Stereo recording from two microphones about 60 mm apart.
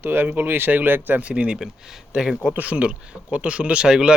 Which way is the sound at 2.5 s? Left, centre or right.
Right.